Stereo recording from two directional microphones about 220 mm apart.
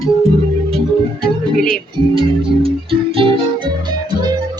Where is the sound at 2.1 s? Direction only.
25° right (ahead or behind).